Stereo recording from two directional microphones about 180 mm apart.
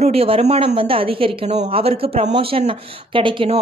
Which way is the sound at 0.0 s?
35° right (ahead or behind).